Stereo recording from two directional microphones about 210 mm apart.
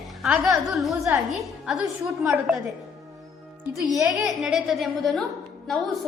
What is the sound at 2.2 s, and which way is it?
Speech, 5° right (ahead or behind).